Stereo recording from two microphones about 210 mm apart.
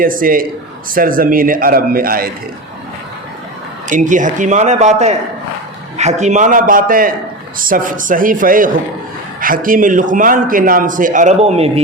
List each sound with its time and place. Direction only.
0.0 s speech: 40° right (ahead or behind)
3.8 s a man's voice: 35° right (ahead or behind)